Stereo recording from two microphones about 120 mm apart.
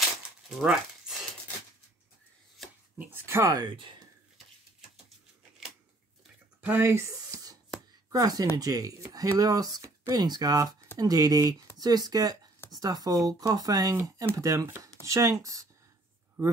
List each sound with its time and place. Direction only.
0.6 s speech: 5° right (ahead or behind)
3.0 s a sound: 20° right (ahead or behind)
3.5 s speech: 45° right (ahead or behind)
6.6 s speech: 20° right (ahead or behind)